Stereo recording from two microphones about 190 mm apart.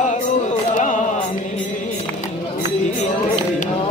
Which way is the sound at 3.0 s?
35° left (ahead or behind).